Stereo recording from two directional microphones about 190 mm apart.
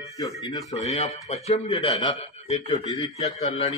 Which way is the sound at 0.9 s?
35° left (ahead or behind).